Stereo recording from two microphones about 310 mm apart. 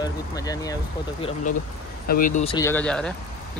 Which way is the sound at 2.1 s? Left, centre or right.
Left.